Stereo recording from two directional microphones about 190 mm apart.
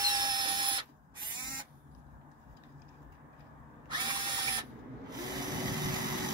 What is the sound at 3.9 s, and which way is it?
Drill, 25° right (ahead or behind).